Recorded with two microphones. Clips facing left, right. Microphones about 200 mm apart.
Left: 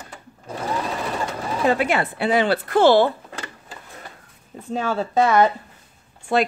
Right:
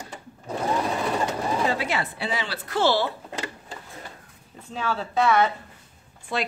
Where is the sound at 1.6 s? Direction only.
55° left (ahead or behind).